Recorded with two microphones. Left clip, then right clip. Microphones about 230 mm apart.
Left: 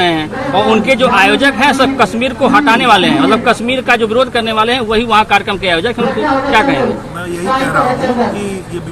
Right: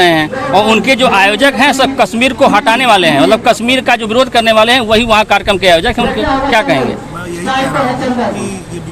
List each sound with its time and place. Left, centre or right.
0.0 s a man's voice: right